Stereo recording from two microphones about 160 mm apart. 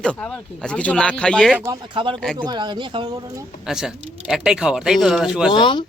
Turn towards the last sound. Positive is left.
turn(degrees=30)  # may be behind; listen again after turning